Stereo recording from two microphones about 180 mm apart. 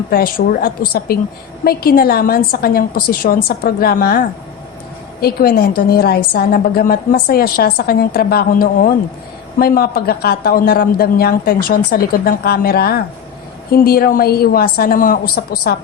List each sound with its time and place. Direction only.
0.1 s a woman's voice: 55° left (ahead or behind)
5.2 s a woman's voice: 55° left (ahead or behind)